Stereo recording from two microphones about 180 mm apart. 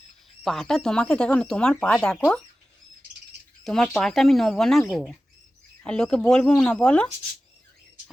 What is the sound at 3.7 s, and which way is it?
Speech, 5° left (ahead or behind).